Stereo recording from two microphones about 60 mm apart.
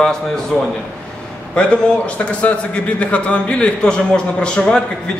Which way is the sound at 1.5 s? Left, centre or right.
Left.